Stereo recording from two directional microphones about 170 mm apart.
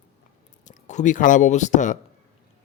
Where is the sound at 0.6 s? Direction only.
45° left (ahead or behind).